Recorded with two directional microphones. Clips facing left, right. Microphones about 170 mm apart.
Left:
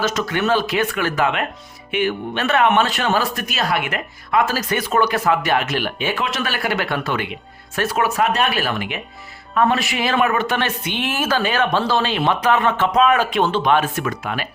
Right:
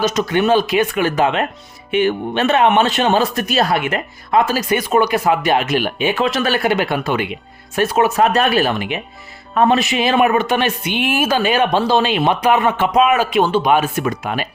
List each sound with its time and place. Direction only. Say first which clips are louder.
0.0 s a man's voice: right 4 dB; 20° right (ahead or behind)
6.1 s speech: right 6 dB; 35° right (ahead or behind)
8.2 s speech: right 5 dB; 35° right (ahead or behind)
8.6 s a man's voice: right 4 dB; 20° right (ahead or behind)